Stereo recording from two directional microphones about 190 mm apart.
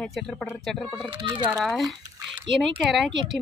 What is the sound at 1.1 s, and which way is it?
Speech, 25° right (ahead or behind).